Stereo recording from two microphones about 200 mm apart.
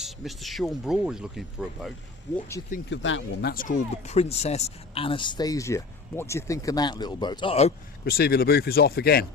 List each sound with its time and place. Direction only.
0.0 s speech: centre (ahead or behind)
2.9 s speech: 70° left (ahead or behind)
3.5 s speech: 40° left (ahead or behind)
8.0 s speech: 50° left (ahead or behind)